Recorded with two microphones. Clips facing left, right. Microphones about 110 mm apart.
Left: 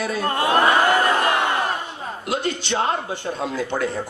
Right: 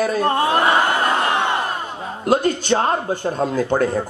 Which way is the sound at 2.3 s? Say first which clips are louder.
Right 8 dB; 45° right (ahead or behind).